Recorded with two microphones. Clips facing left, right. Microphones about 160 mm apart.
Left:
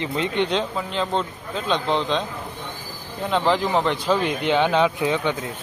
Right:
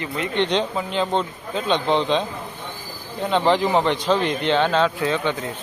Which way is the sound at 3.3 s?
Centre (ahead or behind).